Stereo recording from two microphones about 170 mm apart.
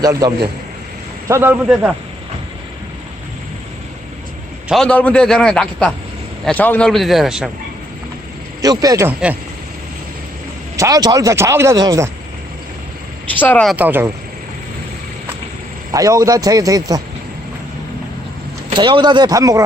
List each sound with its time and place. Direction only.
0.0 s a man's voice: 20° right (ahead or behind)
1.3 s speech: 10° right (ahead or behind)
4.7 s a man's voice: 5° left (ahead or behind)
8.6 s a man's voice: 20° right (ahead or behind)
10.8 s speech: 20° right (ahead or behind)
13.4 s speech: 10° left (ahead or behind)
13.7 s speech: 10° right (ahead or behind)
15.9 s a man's voice: 20° right (ahead or behind)
18.7 s a man's voice: 30° right (ahead or behind)